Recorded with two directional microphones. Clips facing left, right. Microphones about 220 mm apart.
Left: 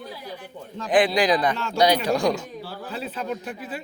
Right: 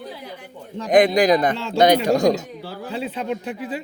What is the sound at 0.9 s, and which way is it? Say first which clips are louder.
A man's voice: right 5 dB; 40° right (ahead or behind).